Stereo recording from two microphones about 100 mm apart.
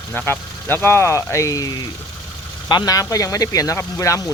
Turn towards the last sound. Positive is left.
turn(degrees=25)  # may be behind; listen again after turning